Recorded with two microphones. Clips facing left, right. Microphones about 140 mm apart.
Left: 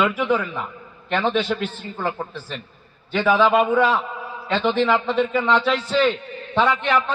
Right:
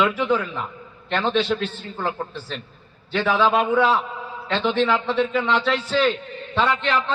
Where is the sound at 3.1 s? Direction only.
10° left (ahead or behind).